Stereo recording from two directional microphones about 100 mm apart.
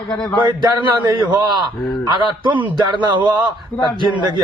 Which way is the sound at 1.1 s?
45° right (ahead or behind).